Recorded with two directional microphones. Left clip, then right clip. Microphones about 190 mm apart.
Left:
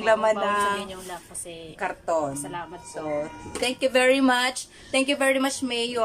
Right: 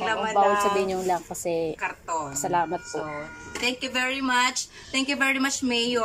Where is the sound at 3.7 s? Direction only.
40° left (ahead or behind).